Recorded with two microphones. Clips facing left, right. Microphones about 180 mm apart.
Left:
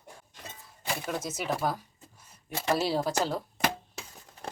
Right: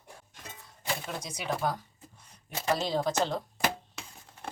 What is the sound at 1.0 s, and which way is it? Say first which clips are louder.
Speech: left 3 dB; 5° left (ahead or behind).